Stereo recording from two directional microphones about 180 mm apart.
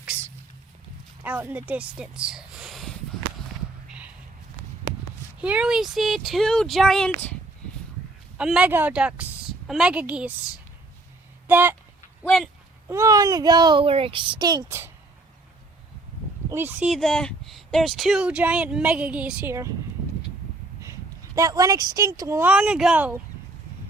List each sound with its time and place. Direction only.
1.2 s speech: 10° right (ahead or behind)
5.4 s speech: 5° right (ahead or behind)
8.4 s speech: 5° right (ahead or behind)
11.4 s a sound: 10° right (ahead or behind)
12.2 s a sound: centre (ahead or behind)
12.9 s speech: 15° right (ahead or behind)
16.5 s speech: 10° right (ahead or behind)
16.9 s speech: centre (ahead or behind); by 19.7 s 15° right (ahead or behind)
21.3 s speech: 20° right (ahead or behind)